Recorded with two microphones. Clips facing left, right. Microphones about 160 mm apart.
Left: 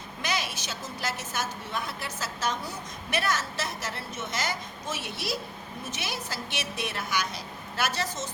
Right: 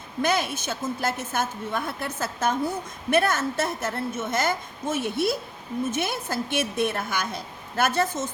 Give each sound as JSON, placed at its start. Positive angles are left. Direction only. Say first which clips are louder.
{"t": 0.2, "sound": "a woman's voice", "louder": "right 8 dB", "side_deg": -50}